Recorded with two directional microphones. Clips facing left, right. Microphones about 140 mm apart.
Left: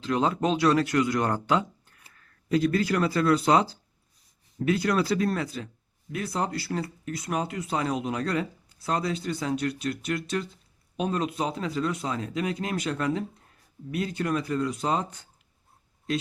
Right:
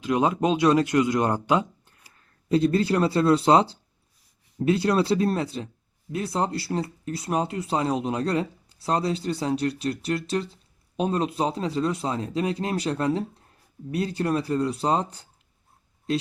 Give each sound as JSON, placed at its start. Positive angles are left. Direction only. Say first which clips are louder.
{"t": 0.0, "sound": "speech", "louder": "right 3 dB", "side_deg": -15}
{"t": 2.5, "sound": "speech", "louder": "right 3 dB", "side_deg": -30}